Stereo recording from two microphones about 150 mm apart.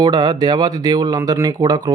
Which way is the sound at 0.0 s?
25° right (ahead or behind).